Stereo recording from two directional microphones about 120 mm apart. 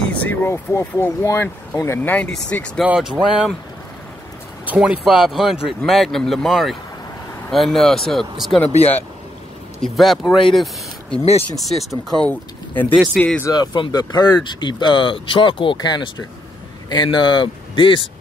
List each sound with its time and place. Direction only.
0.1 s speech: 15° left (ahead or behind)
2.8 s speech: 5° right (ahead or behind)
4.6 s speech: 10° right (ahead or behind)
8.7 s speech: 15° left (ahead or behind)
9.8 s speech: centre (ahead or behind)
13.5 s speech: 35° left (ahead or behind)